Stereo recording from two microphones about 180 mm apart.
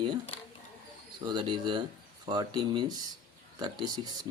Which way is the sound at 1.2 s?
25° right (ahead or behind).